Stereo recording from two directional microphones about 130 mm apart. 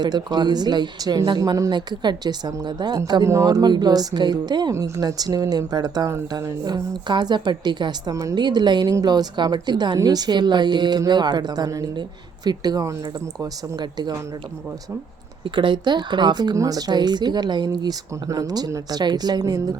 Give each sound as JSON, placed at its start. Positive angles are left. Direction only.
{"t": 0.0, "sound": "a woman's voice", "side_deg": -35}
{"t": 15.4, "sound": "a woman's voice", "side_deg": -40}